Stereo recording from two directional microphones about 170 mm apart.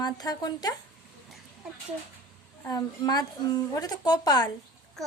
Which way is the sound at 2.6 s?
25° left (ahead or behind).